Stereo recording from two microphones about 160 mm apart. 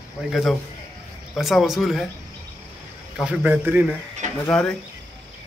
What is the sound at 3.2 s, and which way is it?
Speech, 5° right (ahead or behind).